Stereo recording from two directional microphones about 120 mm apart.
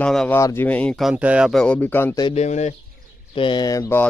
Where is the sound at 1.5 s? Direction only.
5° left (ahead or behind).